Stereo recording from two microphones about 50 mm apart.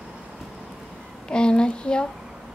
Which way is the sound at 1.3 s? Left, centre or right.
Centre.